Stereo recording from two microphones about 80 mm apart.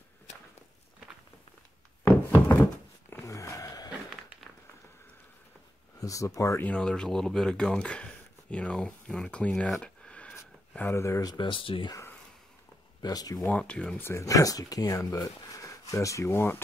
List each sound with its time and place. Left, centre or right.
2.0 s a sound: left
3.3 s a sound: left
5.9 s speech: left
6.6 s speech: centre
9.7 s a sound: centre
10.9 s speech: left
11.2 s speech: left
13.0 s speech: left
13.4 s speech: centre
13.9 s speech: left
14.2 s speech: left
16.3 s speech: left